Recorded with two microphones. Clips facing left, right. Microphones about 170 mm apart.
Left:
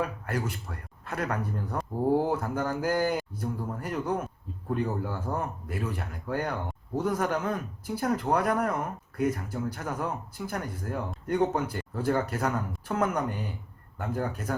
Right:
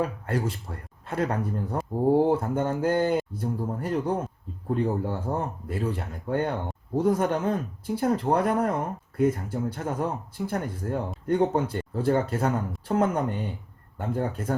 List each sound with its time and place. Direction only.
0.0 s speech: 30° right (ahead or behind)